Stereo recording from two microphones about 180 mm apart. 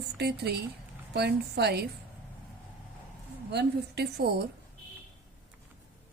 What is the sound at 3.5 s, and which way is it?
Speech, 65° right (ahead or behind).